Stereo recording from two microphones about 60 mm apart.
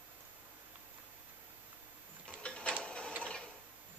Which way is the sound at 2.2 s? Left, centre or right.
Centre.